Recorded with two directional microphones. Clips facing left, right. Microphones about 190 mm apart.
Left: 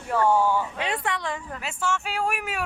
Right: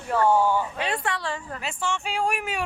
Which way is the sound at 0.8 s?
20° left (ahead or behind).